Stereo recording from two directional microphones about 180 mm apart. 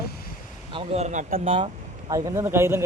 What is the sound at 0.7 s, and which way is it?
Speech, 30° right (ahead or behind).